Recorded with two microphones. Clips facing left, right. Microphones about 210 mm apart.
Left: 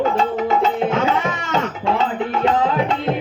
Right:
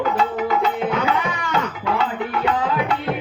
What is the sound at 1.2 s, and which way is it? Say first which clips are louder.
Tabla: left 2 dB; 25° left (ahead or behind).